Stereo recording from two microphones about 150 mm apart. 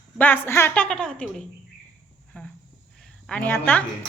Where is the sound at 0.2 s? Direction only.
15° left (ahead or behind).